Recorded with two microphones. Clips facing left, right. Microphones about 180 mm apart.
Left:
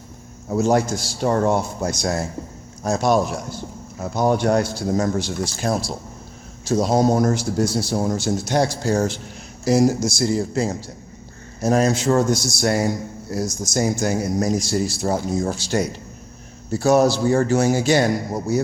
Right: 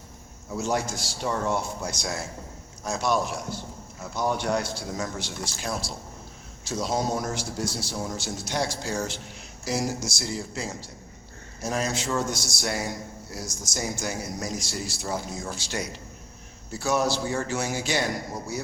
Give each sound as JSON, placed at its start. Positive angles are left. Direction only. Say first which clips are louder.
{"t": 0.4, "sound": "a man's voice", "louder": "left 9 dB", "side_deg": 45}